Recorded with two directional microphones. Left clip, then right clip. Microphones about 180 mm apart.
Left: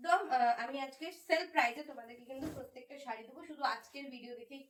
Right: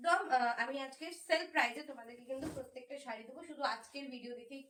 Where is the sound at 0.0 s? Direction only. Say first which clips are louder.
Left 1 dB; 15° right (ahead or behind).